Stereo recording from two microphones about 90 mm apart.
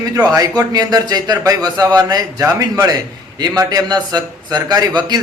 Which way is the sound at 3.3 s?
50° right (ahead or behind).